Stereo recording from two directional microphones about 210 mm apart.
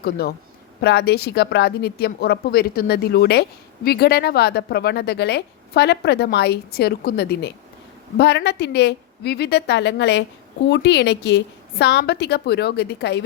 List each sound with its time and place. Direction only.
0.0 s speech: 50° left (ahead or behind)